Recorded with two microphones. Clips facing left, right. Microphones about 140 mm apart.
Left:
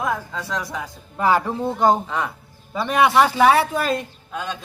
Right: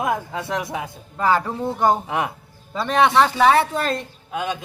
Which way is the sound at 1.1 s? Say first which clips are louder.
Left 1 dB; 15° left (ahead or behind).